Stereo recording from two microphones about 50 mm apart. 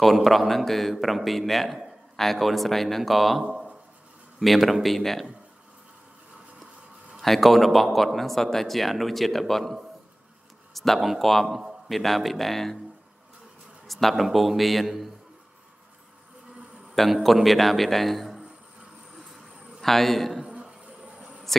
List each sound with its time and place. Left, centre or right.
0.0 s speech: centre
7.2 s speech: centre
13.8 s speech: centre
16.9 s a man's voice: centre
19.8 s a man's voice: centre
20.4 s insect: centre
21.5 s speech: centre